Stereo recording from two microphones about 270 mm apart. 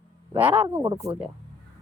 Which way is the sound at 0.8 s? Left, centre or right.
Centre.